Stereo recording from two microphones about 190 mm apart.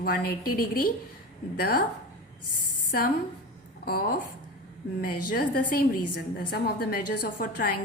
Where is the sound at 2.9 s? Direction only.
50° left (ahead or behind).